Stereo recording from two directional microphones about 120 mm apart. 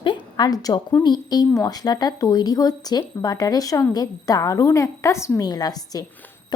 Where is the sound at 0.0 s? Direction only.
40° left (ahead or behind).